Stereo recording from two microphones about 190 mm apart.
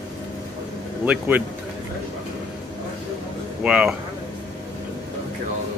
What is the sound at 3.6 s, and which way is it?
Speech, 5° right (ahead or behind).